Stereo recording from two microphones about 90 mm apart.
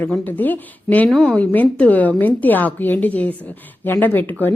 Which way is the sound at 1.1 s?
5° left (ahead or behind).